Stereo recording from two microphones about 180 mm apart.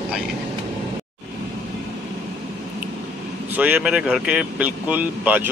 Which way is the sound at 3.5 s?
10° right (ahead or behind).